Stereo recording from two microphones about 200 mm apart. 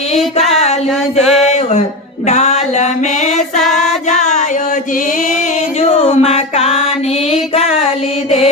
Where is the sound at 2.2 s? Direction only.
30° left (ahead or behind).